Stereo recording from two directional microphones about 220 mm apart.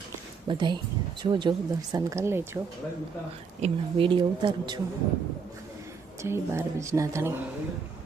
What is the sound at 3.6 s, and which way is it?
Speech, 25° right (ahead or behind).